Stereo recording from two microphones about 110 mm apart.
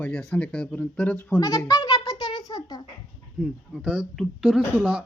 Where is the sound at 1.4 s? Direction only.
30° left (ahead or behind).